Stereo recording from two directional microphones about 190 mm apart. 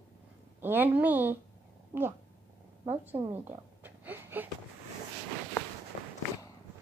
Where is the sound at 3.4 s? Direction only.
10° right (ahead or behind).